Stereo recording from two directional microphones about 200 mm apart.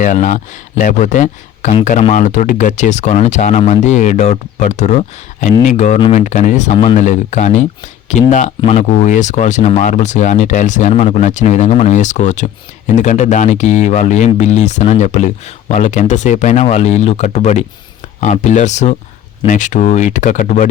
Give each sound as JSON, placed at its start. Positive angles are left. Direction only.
{"t": 0.0, "sound": "speech", "side_deg": 40}